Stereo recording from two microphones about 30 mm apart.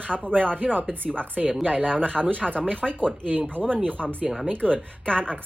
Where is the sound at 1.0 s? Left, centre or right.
Right.